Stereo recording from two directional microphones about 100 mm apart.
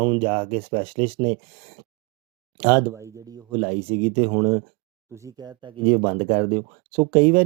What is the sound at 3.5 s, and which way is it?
Speech, 70° right (ahead or behind).